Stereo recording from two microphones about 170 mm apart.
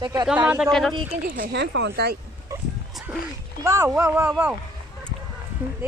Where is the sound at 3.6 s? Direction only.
15° right (ahead or behind).